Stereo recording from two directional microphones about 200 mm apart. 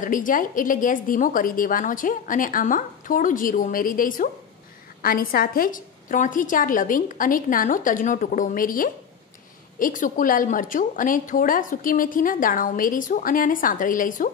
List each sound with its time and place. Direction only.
0.0 s a woman's voice: 40° left (ahead or behind)